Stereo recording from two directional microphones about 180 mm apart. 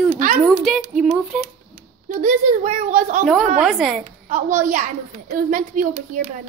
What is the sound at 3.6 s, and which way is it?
Speech, centre (ahead or behind).